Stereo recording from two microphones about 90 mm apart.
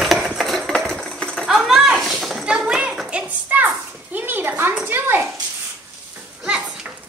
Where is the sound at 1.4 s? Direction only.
5° right (ahead or behind); by 5.2 s 25° right (ahead or behind).